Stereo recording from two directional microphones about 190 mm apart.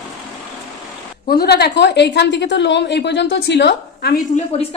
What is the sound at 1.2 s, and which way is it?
A woman's voice, 55° left (ahead or behind).